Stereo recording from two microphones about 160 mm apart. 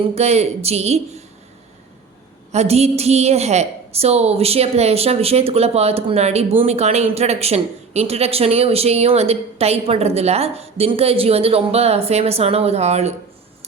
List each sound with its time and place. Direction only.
0.1 s speech: 40° right (ahead or behind)
2.5 s speech: 40° right (ahead or behind)